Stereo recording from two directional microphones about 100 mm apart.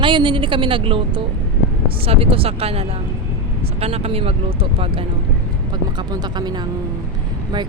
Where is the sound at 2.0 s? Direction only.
70° right (ahead or behind).